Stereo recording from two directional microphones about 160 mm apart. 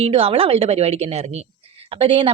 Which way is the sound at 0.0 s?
35° right (ahead or behind).